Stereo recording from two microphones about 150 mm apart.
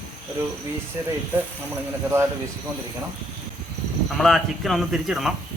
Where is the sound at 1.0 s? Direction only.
20° right (ahead or behind).